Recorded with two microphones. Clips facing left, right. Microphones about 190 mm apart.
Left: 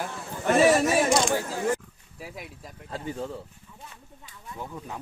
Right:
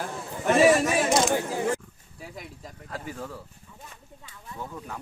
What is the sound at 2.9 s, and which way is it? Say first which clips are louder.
Speech: left 4 dB; 25° left (ahead or behind).